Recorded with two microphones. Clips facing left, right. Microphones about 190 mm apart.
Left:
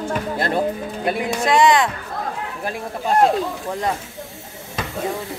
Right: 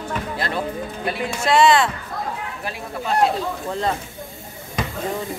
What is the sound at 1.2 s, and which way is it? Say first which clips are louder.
Speech: even; 15° left (ahead or behind).